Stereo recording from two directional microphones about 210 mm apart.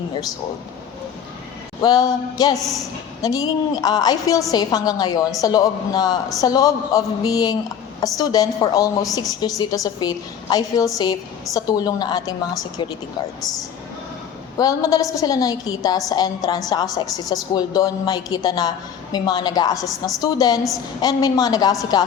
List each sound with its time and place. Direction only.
1.8 s a woman's voice: 20° left (ahead or behind)
2.6 s a woman's voice: centre (ahead or behind)
3.2 s a woman's voice: 15° left (ahead or behind)
14.6 s a woman's voice: 15° left (ahead or behind)